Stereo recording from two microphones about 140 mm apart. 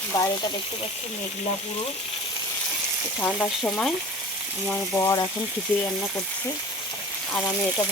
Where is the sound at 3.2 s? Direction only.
10° left (ahead or behind).